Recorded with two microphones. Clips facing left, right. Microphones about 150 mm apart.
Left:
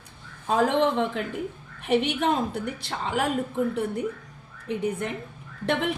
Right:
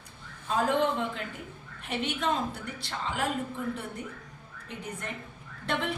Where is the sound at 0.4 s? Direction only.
75° left (ahead or behind).